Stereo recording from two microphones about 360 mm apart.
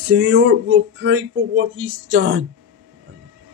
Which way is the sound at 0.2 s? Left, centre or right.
Right.